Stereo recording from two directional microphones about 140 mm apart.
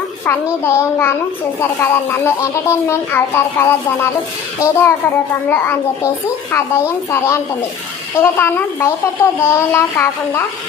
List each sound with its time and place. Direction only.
0.3 s a woman's voice: 15° left (ahead or behind)